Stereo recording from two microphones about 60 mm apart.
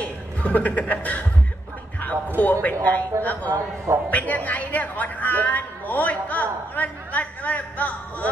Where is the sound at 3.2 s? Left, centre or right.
Left.